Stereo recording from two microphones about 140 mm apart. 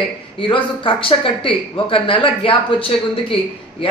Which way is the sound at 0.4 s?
40° left (ahead or behind).